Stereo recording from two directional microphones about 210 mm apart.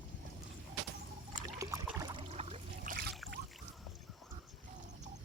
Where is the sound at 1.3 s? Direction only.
15° right (ahead or behind).